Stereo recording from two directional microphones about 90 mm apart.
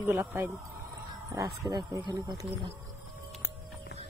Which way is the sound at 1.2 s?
40° right (ahead or behind).